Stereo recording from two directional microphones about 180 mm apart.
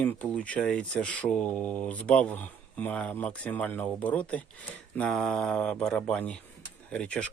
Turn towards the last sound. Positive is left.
turn(degrees=5)  # may be behind; listen again after turning